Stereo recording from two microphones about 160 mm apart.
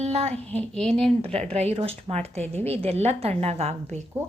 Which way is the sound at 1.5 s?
40° right (ahead or behind).